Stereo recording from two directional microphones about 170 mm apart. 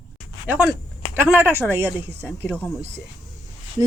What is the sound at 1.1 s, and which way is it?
Speech, 15° right (ahead or behind).